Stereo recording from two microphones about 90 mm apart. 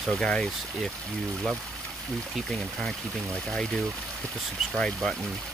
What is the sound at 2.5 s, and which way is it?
Speech, 5° left (ahead or behind).